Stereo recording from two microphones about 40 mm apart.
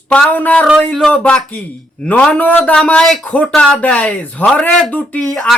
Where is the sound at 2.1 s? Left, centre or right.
Left.